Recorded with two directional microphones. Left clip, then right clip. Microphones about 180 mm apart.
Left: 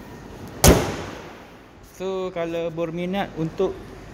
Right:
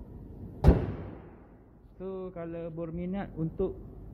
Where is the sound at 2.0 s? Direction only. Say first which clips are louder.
Left 12 dB; 20° left (ahead or behind).